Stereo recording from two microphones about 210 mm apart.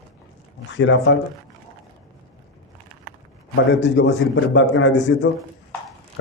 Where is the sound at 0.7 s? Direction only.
60° left (ahead or behind).